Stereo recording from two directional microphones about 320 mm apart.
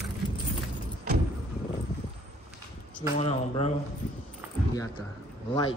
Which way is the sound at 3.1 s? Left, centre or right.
Centre.